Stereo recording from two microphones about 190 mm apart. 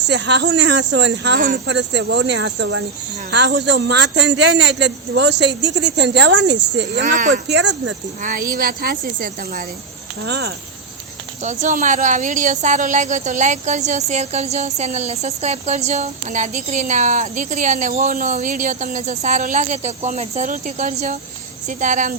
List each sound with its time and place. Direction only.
0.0 s speech: 65° right (ahead or behind)
7.0 s a woman's voice: 40° right (ahead or behind)
7.5 s speech: 65° right (ahead or behind)
8.2 s a woman's voice: 45° right (ahead or behind)
10.2 s speech: 60° right (ahead or behind)
11.4 s speech: 40° right (ahead or behind)